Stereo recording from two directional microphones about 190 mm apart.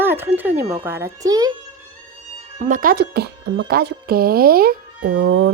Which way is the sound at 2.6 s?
45° right (ahead or behind).